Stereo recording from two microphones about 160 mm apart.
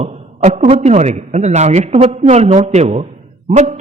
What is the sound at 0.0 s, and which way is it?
A man's voice, 40° right (ahead or behind).